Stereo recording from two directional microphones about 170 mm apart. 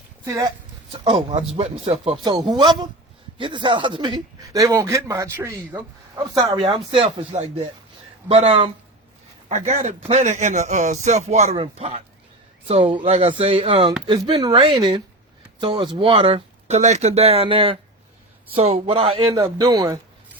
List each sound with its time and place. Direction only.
0.3 s speech: 20° right (ahead or behind)
1.0 s speech: 30° right (ahead or behind)
2.2 s speech: 25° right (ahead or behind)
9.5 s a man's voice: 45° right (ahead or behind); by 20.0 s 20° right (ahead or behind)